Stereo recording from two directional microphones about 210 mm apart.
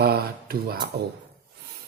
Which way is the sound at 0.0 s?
45° right (ahead or behind).